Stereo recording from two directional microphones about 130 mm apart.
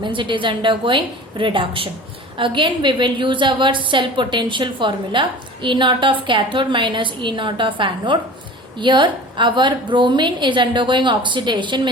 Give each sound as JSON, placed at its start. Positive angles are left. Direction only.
{"t": 0.0, "sound": "a woman's voice", "side_deg": -40}